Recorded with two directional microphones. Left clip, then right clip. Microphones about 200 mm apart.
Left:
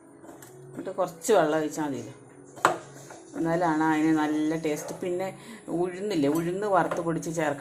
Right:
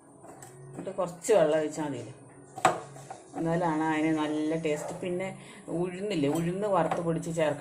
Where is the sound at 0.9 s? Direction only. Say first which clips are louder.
Left 2 dB; 25° left (ahead or behind).